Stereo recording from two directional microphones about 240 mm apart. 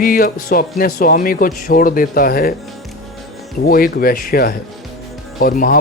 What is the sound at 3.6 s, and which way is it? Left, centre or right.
Speech, left.